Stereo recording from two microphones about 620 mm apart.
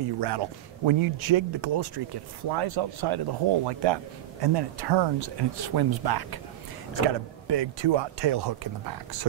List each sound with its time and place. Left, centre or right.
0.2 s speech: right
7.4 s speech: right